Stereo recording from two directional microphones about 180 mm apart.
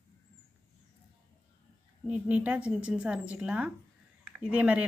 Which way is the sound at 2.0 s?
5° right (ahead or behind).